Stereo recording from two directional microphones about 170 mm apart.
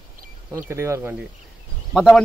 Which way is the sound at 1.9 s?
Centre (ahead or behind).